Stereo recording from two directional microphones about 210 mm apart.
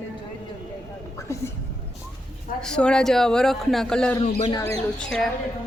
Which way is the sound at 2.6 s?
5° left (ahead or behind).